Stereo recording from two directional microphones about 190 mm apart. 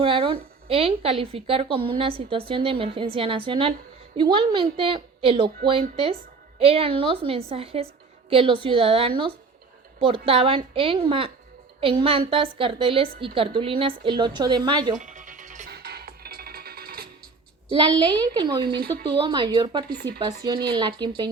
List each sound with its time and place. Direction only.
0.0 s a woman's voice: 30° right (ahead or behind)
6.6 s a woman's voice: 30° right (ahead or behind)
14.9 s music: 40° right (ahead or behind)
15.7 s music: 55° right (ahead or behind)
17.7 s a woman's voice: 25° right (ahead or behind)
19.9 s speech: 60° right (ahead or behind)
20.1 s a woman's voice: 20° right (ahead or behind)